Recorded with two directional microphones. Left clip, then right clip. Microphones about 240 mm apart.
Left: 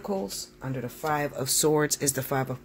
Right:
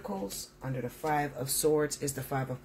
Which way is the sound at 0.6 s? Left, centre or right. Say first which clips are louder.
Left 2 dB; left.